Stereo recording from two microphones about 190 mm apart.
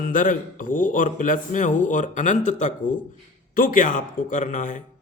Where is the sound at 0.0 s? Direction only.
45° left (ahead or behind).